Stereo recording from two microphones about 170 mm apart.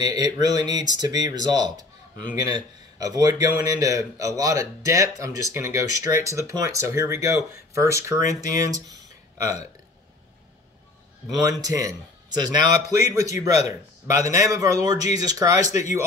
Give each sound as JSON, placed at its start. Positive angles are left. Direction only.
{"t": 0.0, "sound": "speech", "side_deg": -25}
{"t": 11.2, "sound": "speech", "side_deg": -20}